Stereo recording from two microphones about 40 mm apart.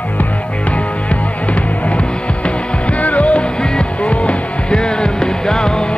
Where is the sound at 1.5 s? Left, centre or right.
Left.